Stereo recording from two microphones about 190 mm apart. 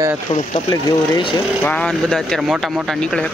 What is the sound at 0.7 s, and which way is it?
Speech, 20° left (ahead or behind).